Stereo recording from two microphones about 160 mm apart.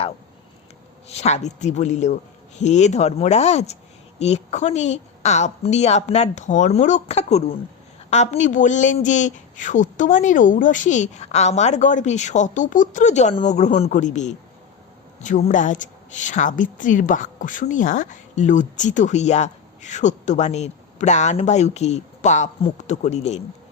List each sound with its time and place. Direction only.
1.0 s a woman's voice: 40° left (ahead or behind)